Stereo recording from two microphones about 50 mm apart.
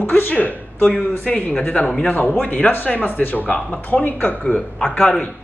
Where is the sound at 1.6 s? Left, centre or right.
Left.